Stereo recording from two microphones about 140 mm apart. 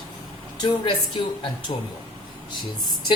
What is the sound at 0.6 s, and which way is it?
A woman's voice, 35° left (ahead or behind).